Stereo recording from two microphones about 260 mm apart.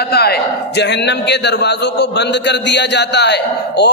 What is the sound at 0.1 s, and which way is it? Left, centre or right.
A man's voice, left.